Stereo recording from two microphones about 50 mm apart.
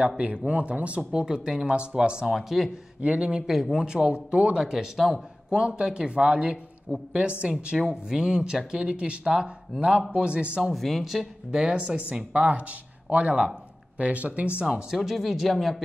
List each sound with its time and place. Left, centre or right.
0.5 s speech: right
1.2 s speech: centre
2.2 s speech: centre
3.0 s speech: right
4.6 s speech: centre
5.5 s speech: centre
10.6 s speech: centre
11.6 s speech: centre
14.9 s speech: centre